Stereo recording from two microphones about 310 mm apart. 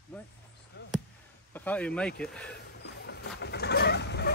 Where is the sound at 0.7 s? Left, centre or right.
Left.